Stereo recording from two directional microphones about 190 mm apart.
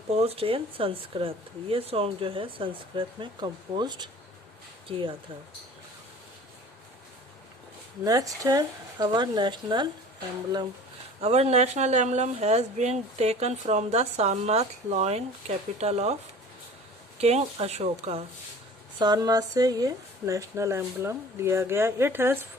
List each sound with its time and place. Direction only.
0.1 s speech: 30° right (ahead or behind)
8.0 s speech: 20° right (ahead or behind)
11.2 s speech: 35° right (ahead or behind)
17.2 s speech: 35° right (ahead or behind)
18.9 s speech: 20° right (ahead or behind)